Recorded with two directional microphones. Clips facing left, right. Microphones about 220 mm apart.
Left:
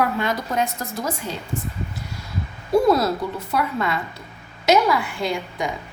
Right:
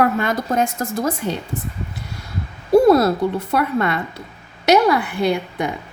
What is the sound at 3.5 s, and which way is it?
A woman's voice, 60° right (ahead or behind).